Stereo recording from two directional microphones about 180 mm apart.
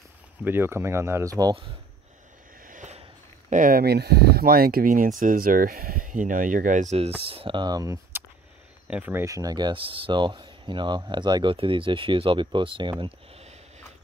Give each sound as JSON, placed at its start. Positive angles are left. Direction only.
{"t": 0.4, "sound": "speech", "side_deg": -10}
{"t": 2.6, "sound": "speech", "side_deg": -45}